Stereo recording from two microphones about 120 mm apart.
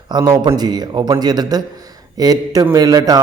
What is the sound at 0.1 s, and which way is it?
Speech, 35° right (ahead or behind).